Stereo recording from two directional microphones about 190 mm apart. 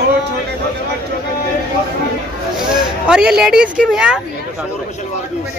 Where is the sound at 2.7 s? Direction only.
5° right (ahead or behind).